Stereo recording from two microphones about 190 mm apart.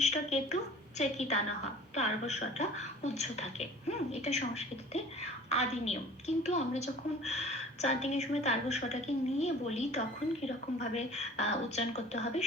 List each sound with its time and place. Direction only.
0.3 s a woman's voice: 35° left (ahead or behind)